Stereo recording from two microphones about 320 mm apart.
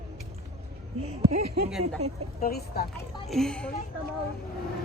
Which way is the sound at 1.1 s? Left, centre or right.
Centre.